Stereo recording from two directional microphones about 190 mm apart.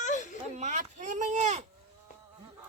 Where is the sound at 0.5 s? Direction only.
40° right (ahead or behind).